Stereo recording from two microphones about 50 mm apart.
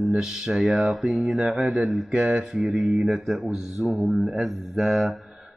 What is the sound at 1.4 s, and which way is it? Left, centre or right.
Speech, right.